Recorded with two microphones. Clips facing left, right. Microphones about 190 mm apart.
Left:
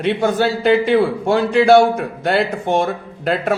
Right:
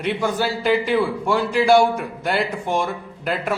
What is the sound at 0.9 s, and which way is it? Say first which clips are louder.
Speech: left 5 dB; 65° left (ahead or behind).